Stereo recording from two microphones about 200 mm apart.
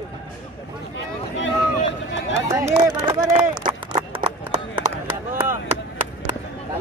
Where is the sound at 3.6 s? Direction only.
25° right (ahead or behind).